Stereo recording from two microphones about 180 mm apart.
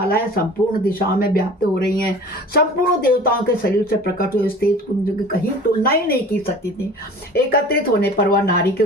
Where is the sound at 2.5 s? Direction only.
55° left (ahead or behind).